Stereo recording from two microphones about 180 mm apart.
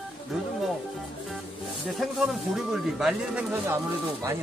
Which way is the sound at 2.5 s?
Centre (ahead or behind).